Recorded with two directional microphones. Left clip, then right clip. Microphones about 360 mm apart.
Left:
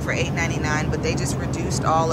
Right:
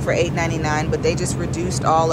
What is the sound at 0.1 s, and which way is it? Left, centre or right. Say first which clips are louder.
Speech: right 5 dB; centre.